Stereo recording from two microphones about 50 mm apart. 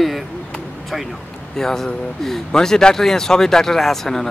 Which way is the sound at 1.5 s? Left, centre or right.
Centre.